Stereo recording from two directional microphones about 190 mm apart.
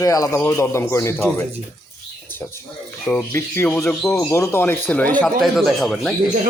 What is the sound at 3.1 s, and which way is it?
Speech, 15° left (ahead or behind).